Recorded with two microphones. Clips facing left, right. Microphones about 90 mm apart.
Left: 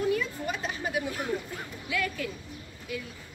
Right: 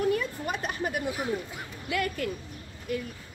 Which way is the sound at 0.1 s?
50° right (ahead or behind).